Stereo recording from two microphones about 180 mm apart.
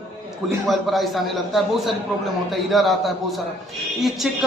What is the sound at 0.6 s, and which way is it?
A woman's voice, centre (ahead or behind).